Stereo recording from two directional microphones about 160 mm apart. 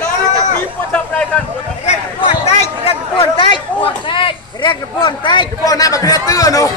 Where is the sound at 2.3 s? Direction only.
35° left (ahead or behind).